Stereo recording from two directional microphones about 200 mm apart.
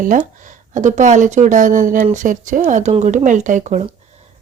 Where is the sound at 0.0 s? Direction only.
40° right (ahead or behind).